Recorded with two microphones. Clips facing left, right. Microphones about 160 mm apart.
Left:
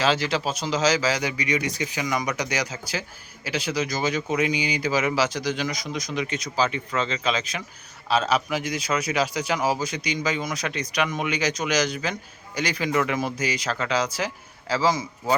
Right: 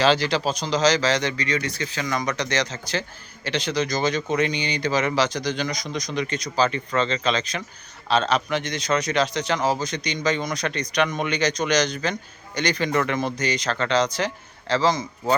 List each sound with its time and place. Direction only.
0.0 s speech: 5° left (ahead or behind)